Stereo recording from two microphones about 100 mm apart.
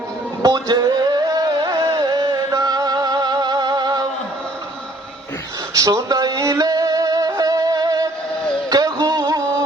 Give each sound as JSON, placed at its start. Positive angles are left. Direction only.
{"t": 0.4, "sound": "music", "side_deg": -40}
{"t": 5.7, "sound": "music", "side_deg": -35}